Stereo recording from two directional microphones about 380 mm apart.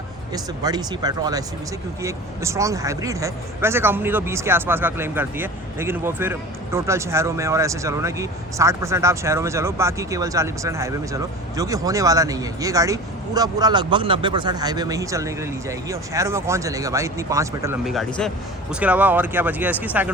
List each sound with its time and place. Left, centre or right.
0.3 s speech: centre